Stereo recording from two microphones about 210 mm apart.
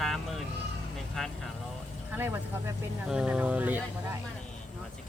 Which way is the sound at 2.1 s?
10° right (ahead or behind).